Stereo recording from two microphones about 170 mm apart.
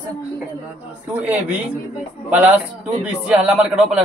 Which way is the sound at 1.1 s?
10° right (ahead or behind).